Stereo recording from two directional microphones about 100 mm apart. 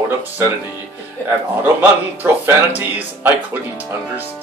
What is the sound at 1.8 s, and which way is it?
Speech, 20° right (ahead or behind).